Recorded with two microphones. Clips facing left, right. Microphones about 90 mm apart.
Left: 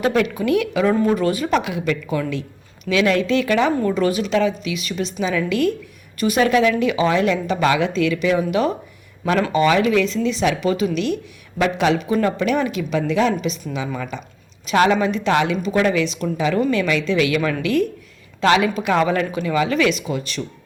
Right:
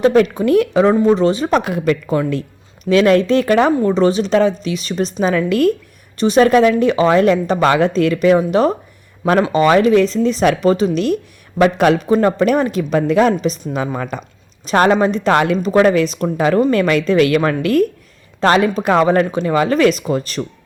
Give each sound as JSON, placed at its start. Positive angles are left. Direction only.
{"t": 0.0, "sound": "a woman's voice", "side_deg": -35}
{"t": 1.5, "sound": "a woman's voice", "side_deg": -40}
{"t": 3.8, "sound": "a woman's voice", "side_deg": -30}
{"t": 6.1, "sound": "a woman's voice", "side_deg": -30}
{"t": 12.0, "sound": "a woman's voice", "side_deg": -40}